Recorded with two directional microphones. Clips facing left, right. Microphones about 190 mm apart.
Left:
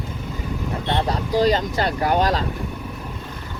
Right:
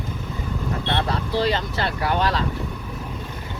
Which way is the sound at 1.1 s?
40° left (ahead or behind).